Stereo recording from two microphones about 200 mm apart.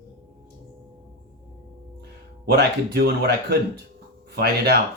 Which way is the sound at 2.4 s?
55° right (ahead or behind).